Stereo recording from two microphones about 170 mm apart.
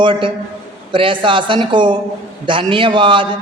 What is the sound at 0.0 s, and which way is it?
A woman's voice, 30° right (ahead or behind).